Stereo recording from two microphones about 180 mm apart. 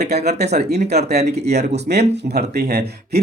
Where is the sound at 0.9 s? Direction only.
40° right (ahead or behind).